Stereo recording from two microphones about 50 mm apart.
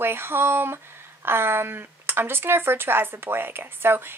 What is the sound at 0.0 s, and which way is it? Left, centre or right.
Speech, right.